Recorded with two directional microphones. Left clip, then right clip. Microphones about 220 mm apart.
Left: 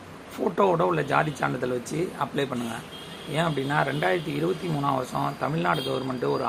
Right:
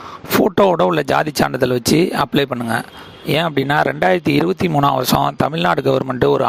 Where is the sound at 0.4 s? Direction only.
45° right (ahead or behind).